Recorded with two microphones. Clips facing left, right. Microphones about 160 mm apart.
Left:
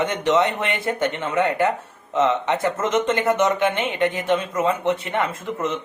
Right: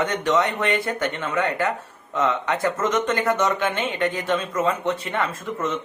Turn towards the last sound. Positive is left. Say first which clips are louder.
# left 1 dB
turn(degrees=20)  # may be behind; listen again after turning